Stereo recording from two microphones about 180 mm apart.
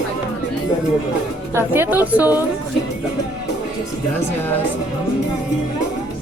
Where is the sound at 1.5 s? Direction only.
15° right (ahead or behind).